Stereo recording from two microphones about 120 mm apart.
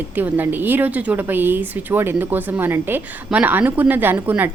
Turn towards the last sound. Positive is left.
turn(degrees=-15)  # may be behind; listen again after turning